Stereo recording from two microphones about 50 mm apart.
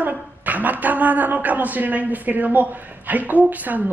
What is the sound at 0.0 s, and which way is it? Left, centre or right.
A woman's voice, right.